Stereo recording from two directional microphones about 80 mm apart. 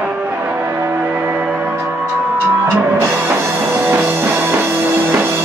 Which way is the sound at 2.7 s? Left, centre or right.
Right.